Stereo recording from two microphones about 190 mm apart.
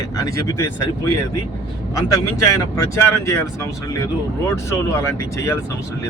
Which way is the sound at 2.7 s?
15° left (ahead or behind).